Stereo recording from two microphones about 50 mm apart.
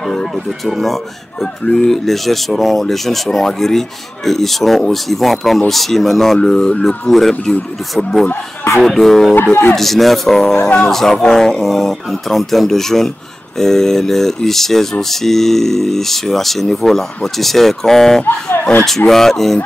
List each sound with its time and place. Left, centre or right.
0.0 s a sound: centre
0.5 s speech: centre
9.3 s speech: left
9.8 s speech: centre
18.2 s speech: left
19.0 s speech: centre